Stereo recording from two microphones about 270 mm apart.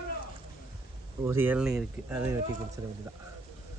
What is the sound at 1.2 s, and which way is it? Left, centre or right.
Speech, centre.